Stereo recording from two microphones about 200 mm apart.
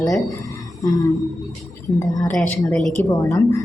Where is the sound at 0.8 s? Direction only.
15° left (ahead or behind).